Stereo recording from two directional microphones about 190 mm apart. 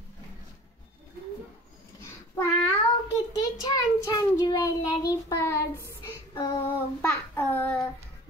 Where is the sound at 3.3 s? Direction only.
20° left (ahead or behind).